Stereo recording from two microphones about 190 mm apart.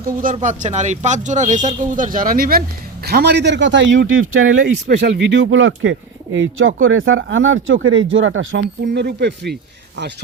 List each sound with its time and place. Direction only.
0.4 s speech: 40° right (ahead or behind); by 8.6 s 85° right
8.9 s speech: 60° right (ahead or behind)